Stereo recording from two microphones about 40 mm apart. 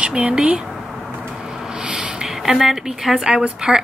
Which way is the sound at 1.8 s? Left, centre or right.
Right.